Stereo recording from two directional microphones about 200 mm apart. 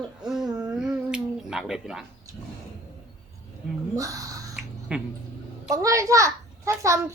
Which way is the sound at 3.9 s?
15° right (ahead or behind).